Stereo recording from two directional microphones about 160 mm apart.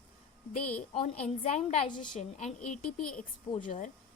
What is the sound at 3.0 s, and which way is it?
Speech, 5° left (ahead or behind).